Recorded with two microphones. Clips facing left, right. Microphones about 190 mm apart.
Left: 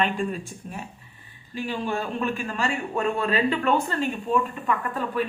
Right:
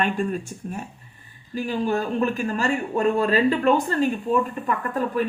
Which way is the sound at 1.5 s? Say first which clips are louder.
Right 4 dB; 40° right (ahead or behind).